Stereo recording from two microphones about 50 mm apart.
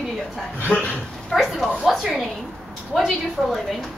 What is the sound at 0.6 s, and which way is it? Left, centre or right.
Speech, left.